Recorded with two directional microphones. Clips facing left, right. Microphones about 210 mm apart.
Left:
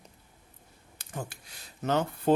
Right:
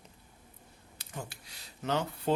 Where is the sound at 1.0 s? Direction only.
50° left (ahead or behind).